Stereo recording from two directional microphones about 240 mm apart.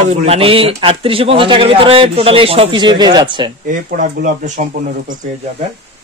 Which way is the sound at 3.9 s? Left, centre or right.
Right.